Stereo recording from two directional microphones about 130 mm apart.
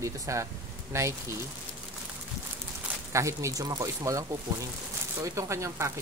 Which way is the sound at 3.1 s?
25° right (ahead or behind).